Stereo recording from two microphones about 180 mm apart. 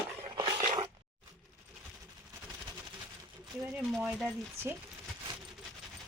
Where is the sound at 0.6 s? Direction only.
40° right (ahead or behind).